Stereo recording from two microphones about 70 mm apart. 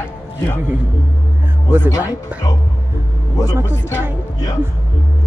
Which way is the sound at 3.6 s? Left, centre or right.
Left.